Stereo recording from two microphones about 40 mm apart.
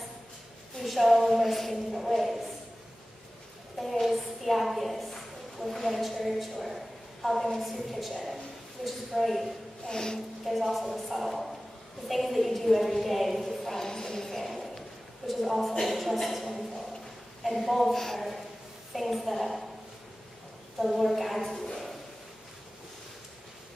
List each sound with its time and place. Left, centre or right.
0.7 s speech: centre
3.8 s a woman's voice: centre
9.8 s speech: centre
10.4 s a woman's voice: centre
20.8 s speech: centre